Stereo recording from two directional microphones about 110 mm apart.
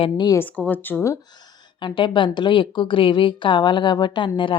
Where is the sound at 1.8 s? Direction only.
45° left (ahead or behind).